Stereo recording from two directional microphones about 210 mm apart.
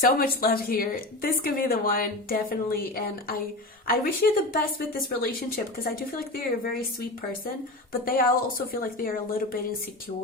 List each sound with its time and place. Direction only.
0.0 s speech: 45° left (ahead or behind)